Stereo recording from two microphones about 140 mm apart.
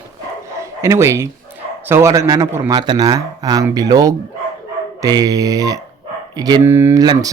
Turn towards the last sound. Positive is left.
turn(degrees=-30)  # may be behind; listen again after turning